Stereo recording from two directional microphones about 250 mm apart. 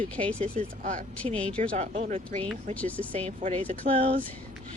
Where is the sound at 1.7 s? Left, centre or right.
Right.